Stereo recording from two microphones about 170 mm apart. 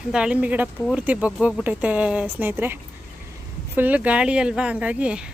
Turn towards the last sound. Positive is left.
turn(degrees=-5)  # may be behind; listen again after turning